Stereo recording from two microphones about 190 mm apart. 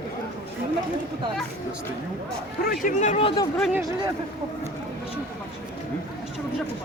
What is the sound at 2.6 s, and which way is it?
Speech, 50° left (ahead or behind).